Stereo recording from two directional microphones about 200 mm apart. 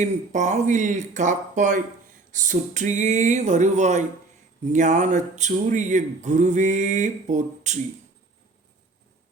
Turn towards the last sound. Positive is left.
turn(degrees=-35)  # may be behind; listen again after turning